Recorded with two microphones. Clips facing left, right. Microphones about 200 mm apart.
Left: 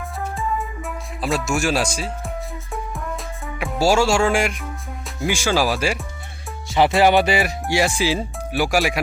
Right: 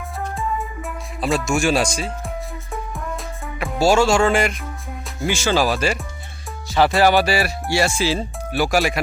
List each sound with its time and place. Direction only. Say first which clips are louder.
0.3 s music: left 1 dB; centre (ahead or behind)
3.8 s speech: right 2 dB; 10° left (ahead or behind)
6.7 s speech: even; 20° left (ahead or behind)